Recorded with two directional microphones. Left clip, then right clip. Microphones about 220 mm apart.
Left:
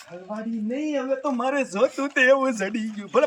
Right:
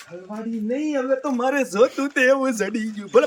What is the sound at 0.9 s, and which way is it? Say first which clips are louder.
Speech: right 2 dB; 10° right (ahead or behind).